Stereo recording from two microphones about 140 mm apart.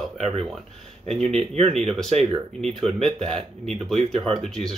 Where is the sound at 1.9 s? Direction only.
5° left (ahead or behind).